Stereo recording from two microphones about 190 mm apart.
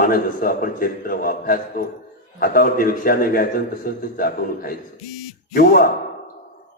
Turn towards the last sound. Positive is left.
turn(degrees=55)  # may be behind; listen again after turning